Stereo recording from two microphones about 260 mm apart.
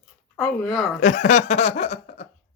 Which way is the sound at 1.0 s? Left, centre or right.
Left.